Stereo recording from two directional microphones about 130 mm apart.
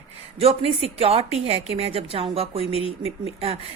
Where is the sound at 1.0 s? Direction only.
50° right (ahead or behind).